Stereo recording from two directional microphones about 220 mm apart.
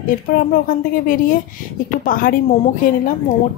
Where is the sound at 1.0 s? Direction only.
40° left (ahead or behind).